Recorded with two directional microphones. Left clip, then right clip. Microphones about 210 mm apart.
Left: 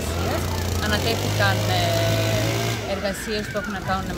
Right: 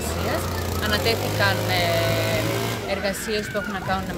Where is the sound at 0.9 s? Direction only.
5° right (ahead or behind).